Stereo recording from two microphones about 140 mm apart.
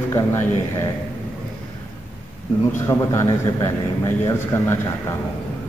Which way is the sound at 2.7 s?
20° left (ahead or behind).